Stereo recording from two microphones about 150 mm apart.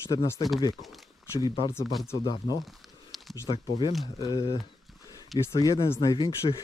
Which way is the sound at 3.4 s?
35° left (ahead or behind).